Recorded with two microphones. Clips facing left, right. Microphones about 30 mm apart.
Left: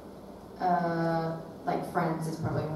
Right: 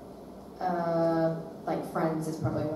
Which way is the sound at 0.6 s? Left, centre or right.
Centre.